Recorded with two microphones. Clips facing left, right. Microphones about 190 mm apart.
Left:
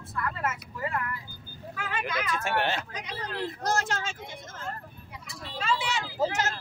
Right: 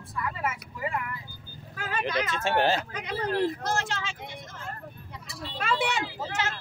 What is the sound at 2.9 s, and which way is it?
Speech, 55° right (ahead or behind).